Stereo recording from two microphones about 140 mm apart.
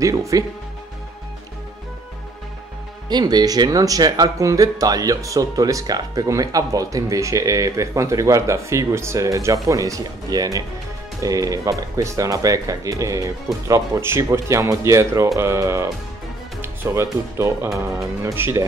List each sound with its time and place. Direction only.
0.0 s speech: 25° right (ahead or behind)
3.1 s speech: 30° right (ahead or behind)